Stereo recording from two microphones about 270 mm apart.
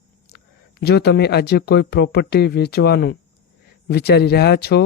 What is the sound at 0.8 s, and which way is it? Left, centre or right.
Speech, left.